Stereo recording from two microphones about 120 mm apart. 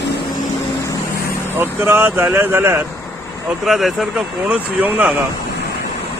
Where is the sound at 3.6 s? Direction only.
Centre (ahead or behind).